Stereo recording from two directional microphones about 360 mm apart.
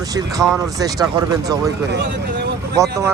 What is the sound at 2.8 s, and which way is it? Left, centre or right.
Speech, centre.